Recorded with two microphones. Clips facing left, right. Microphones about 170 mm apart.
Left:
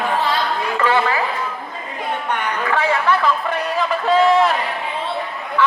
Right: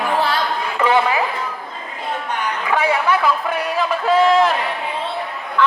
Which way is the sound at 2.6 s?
15° right (ahead or behind).